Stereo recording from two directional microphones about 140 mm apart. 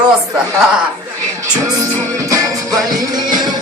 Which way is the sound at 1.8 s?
25° right (ahead or behind).